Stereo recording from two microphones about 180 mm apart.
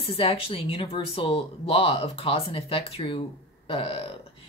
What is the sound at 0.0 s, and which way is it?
Speech, 35° left (ahead or behind).